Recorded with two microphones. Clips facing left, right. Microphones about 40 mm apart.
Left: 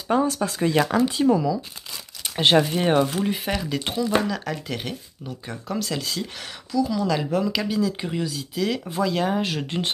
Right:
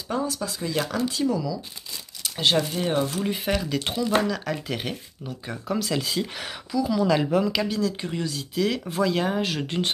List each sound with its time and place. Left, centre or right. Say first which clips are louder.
0.1 s speech: left 6 dB; left
3.3 s speech: even; centre